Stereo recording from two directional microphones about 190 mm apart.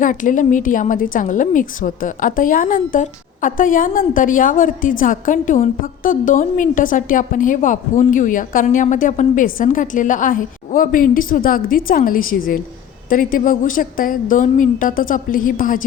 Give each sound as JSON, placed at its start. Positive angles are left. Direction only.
{"t": 0.0, "sound": "a woman's voice", "side_deg": 45}